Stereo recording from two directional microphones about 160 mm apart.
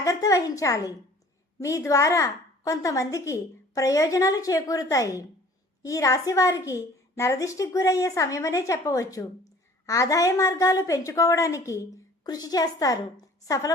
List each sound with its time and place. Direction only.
0.0 s a woman's voice: 20° left (ahead or behind)